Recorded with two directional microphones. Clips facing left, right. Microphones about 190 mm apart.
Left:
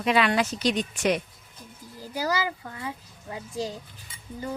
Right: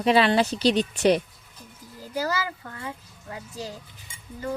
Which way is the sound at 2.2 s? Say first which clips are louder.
Even; 10° left (ahead or behind).